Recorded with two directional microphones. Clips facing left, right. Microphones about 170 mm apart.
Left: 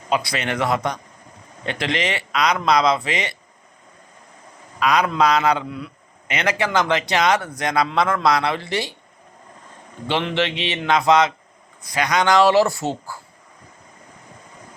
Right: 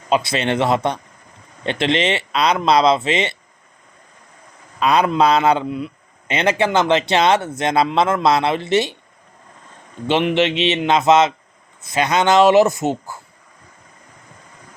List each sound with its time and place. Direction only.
0.1 s a man's voice: 25° right (ahead or behind)
4.8 s a man's voice: 30° right (ahead or behind)
10.1 s a man's voice: 20° right (ahead or behind)